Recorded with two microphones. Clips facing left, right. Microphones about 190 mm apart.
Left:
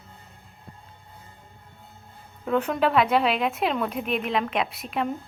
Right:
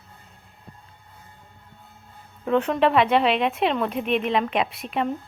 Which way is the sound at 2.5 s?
5° left (ahead or behind).